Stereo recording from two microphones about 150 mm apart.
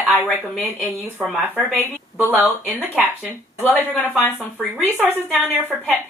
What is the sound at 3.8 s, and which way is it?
Speech, 15° left (ahead or behind).